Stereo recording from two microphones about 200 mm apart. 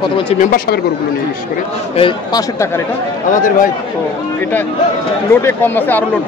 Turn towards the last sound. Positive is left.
turn(degrees=10)  # may be behind; listen again after turning